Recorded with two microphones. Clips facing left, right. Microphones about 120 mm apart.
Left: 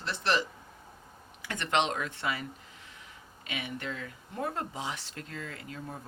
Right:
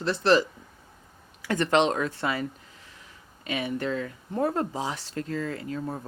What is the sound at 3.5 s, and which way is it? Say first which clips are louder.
Speech: right 9 dB; 35° right (ahead or behind).